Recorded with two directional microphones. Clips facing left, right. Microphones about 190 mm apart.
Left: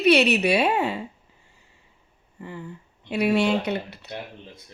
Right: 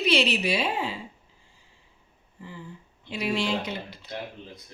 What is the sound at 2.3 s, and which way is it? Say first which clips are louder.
A woman's voice: left 5 dB; 65° left (ahead or behind).